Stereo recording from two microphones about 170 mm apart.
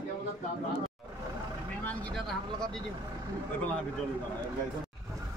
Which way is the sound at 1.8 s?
5° left (ahead or behind).